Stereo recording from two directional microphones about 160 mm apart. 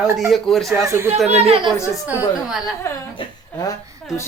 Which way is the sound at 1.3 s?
40° right (ahead or behind).